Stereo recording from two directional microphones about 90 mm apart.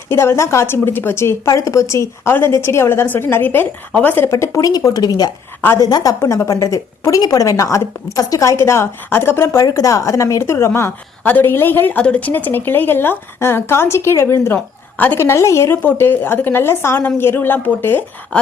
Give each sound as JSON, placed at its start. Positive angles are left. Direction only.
{"t": 0.1, "sound": "a woman's voice", "side_deg": 30}
{"t": 9.6, "sound": "a woman's voice", "side_deg": 40}
{"t": 11.2, "sound": "a woman's voice", "side_deg": 20}
{"t": 14.9, "sound": "a woman's voice", "side_deg": 20}
{"t": 15.2, "sound": "a woman's voice", "side_deg": 30}